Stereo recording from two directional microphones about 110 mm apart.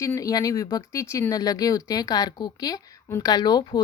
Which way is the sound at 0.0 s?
30° left (ahead or behind).